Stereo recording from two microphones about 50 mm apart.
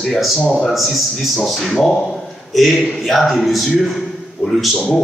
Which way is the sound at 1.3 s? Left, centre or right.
Centre.